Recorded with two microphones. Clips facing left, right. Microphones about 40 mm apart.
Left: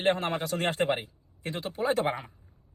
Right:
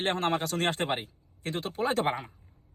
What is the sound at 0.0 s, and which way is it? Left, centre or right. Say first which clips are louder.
A man's voice: left 1 dB; right.